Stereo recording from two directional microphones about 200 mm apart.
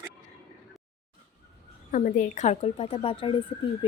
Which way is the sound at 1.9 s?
40° left (ahead or behind).